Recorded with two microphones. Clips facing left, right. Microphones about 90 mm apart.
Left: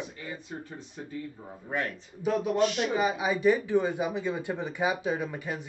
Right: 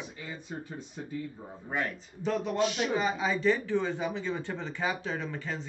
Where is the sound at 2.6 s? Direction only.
15° right (ahead or behind).